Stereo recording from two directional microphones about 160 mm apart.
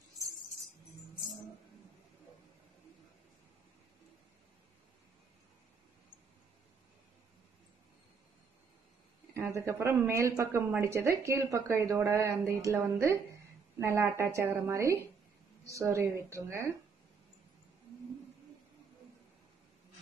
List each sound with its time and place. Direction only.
9.3 s a woman's voice: 15° right (ahead or behind)